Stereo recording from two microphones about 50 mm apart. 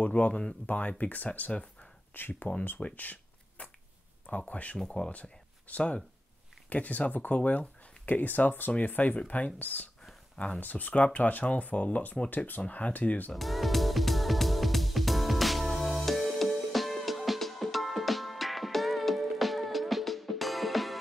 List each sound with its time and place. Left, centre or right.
0.0 s speech: left
2.8 s a sound: left
4.3 s speech: left
4.7 s speech: centre
5.2 s a sound: left
6.7 s speech: left
10.3 s speech: left
10.6 s speech: left
13.3 s music: centre